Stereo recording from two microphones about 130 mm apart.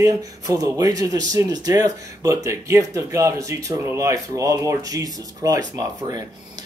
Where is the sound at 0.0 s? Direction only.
25° right (ahead or behind).